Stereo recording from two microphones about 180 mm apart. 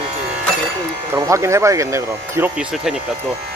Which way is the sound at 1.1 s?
15° right (ahead or behind).